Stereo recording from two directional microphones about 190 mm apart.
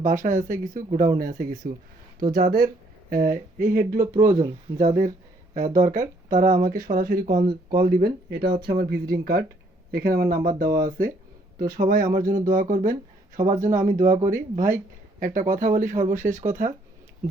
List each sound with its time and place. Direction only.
0.0 s speech: 40° right (ahead or behind)
4.8 s speech: 45° right (ahead or behind)
13.7 s speech: 15° right (ahead or behind)
13.9 s speech: 45° right (ahead or behind)